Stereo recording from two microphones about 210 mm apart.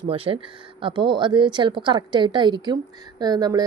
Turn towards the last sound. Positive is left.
turn(degrees=-20)  # may be behind; listen again after turning